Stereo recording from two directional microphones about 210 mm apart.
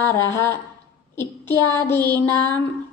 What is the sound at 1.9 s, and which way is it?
Music, 20° right (ahead or behind).